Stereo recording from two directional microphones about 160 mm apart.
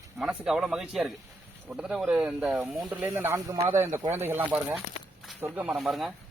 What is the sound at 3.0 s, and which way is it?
A man's voice, 15° right (ahead or behind).